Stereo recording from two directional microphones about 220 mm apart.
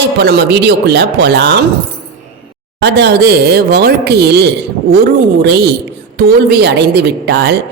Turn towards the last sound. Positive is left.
turn(degrees=-50)  # may be behind; listen again after turning